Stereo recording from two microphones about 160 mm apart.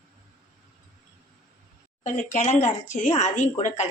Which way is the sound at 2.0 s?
50° left (ahead or behind).